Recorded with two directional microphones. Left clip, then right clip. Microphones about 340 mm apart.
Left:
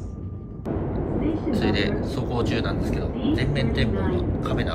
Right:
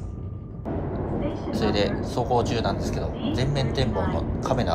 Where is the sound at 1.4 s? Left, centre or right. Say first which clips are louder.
Right 2 dB; centre.